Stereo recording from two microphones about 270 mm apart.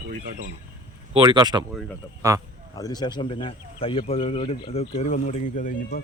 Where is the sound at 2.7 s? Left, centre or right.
Centre; by 6.0 s left.